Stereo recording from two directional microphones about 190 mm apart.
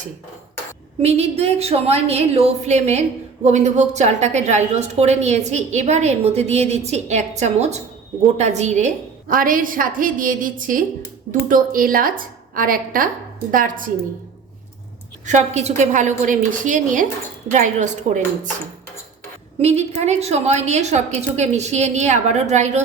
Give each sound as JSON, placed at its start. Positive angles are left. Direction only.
{"t": 1.0, "sound": "a woman's voice", "side_deg": -35}
{"t": 15.3, "sound": "a woman's voice", "side_deg": -35}
{"t": 19.5, "sound": "a woman's voice", "side_deg": -35}